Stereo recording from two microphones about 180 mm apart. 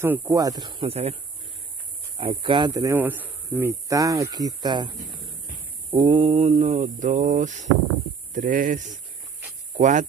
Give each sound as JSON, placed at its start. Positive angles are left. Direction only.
{"t": 0.0, "sound": "speech", "side_deg": -10}
{"t": 2.1, "sound": "speech", "side_deg": -30}
{"t": 6.4, "sound": "a sound", "side_deg": -35}
{"t": 9.8, "sound": "speech", "side_deg": -45}